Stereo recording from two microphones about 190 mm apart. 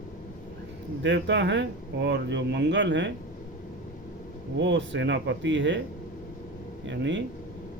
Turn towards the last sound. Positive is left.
turn(degrees=-70)  # may be behind; listen again after turning